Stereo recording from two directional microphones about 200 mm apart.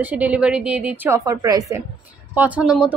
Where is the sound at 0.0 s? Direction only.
10° right (ahead or behind).